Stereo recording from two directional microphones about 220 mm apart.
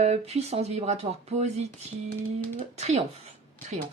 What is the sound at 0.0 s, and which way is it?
Speech, 30° right (ahead or behind).